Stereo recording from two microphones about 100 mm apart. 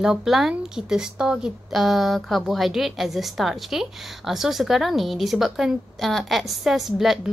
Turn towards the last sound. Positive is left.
turn(degrees=-5)  # may be behind; listen again after turning